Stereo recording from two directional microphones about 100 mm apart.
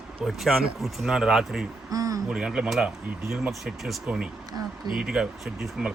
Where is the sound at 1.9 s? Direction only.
35° right (ahead or behind).